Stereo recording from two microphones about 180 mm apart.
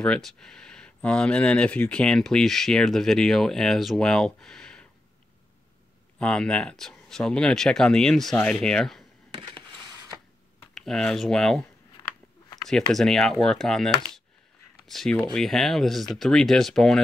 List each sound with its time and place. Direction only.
0.0 s speech: 5° left (ahead or behind)
6.1 s speech: 5° left (ahead or behind)
9.5 s a sound: 25° right (ahead or behind)
10.7 s speech: 5° left (ahead or behind)
12.0 s a sound: 20° left (ahead or behind)
12.6 s speech: centre (ahead or behind)